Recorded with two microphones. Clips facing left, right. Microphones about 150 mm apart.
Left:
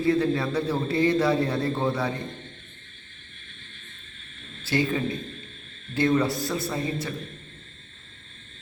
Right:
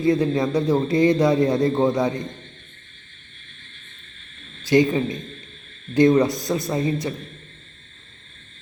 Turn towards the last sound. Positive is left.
turn(degrees=-20)  # may be behind; listen again after turning